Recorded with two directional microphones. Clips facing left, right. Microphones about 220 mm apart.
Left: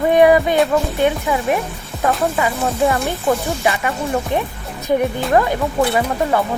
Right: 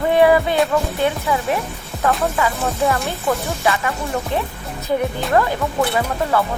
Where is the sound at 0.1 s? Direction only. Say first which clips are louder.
Left 2 dB; 15° left (ahead or behind).